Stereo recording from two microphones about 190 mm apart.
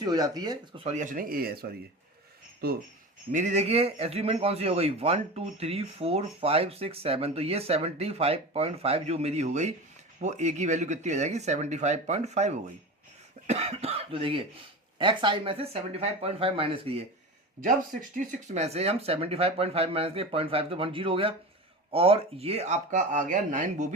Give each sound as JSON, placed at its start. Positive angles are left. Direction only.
{"t": 0.0, "sound": "speech", "side_deg": -20}
{"t": 0.9, "sound": "speech", "side_deg": -40}
{"t": 3.3, "sound": "a man's voice", "side_deg": -40}
{"t": 17.6, "sound": "a man's voice", "side_deg": -45}